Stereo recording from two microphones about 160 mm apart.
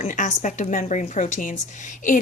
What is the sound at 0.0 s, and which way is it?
Speech, 50° left (ahead or behind).